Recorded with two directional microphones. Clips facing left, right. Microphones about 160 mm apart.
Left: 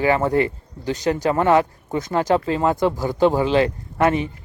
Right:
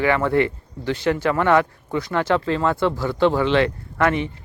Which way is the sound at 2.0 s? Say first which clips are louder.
Left 2 dB; 40° left (ahead or behind).